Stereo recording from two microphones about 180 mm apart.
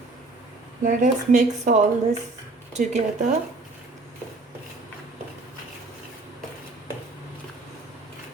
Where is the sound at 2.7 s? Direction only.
40° right (ahead or behind).